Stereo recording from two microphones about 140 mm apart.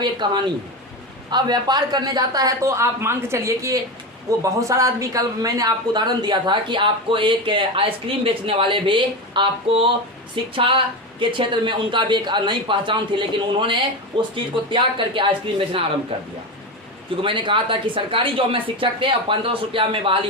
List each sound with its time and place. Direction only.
0.0 s speech: 30° right (ahead or behind)